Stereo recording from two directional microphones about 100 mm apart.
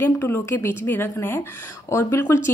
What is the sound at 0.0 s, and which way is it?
Speech, 25° left (ahead or behind).